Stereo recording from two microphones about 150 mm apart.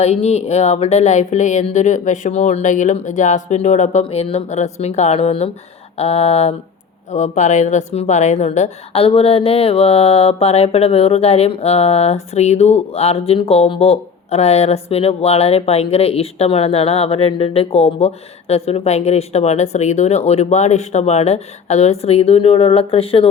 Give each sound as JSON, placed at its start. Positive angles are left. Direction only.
{"t": 0.0, "sound": "a woman's voice", "side_deg": 45}